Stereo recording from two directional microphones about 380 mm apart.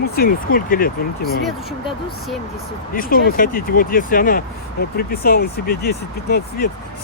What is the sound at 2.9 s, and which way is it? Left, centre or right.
Speech, left.